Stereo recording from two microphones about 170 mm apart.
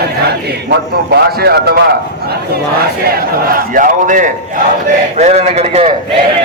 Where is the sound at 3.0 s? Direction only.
60° right (ahead or behind); by 5.9 s 35° right (ahead or behind).